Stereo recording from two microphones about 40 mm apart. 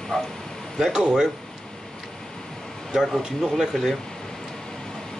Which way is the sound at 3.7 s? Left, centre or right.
Centre.